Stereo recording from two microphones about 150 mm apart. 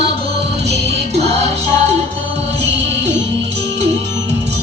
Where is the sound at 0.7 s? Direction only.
45° right (ahead or behind).